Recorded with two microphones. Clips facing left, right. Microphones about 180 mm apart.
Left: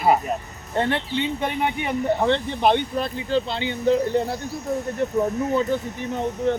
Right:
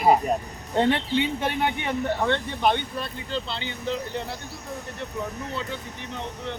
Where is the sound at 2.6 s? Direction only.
35° left (ahead or behind).